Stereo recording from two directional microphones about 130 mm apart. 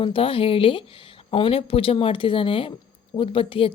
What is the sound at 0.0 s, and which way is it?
Speech, 45° left (ahead or behind).